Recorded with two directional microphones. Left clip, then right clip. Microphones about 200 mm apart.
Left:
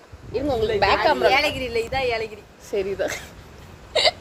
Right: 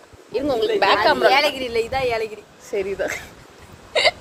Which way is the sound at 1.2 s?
25° right (ahead or behind).